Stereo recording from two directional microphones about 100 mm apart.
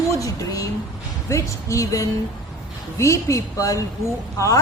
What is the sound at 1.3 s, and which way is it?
A woman's voice, 30° left (ahead or behind).